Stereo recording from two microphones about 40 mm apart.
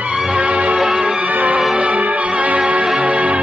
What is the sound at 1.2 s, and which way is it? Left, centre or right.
Music, right.